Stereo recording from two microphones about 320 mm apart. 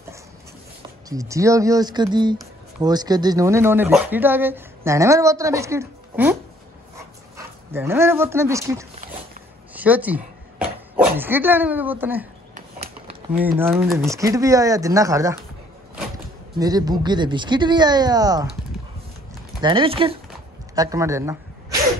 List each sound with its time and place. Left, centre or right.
1.0 s speech: centre
7.0 s pant: centre
9.8 s a sound: centre
12.5 s a sound: centre
13.6 s speech: centre
16.5 s speech: centre
19.6 s speech: centre